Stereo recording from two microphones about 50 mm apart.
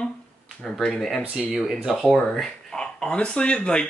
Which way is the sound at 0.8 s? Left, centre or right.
Centre.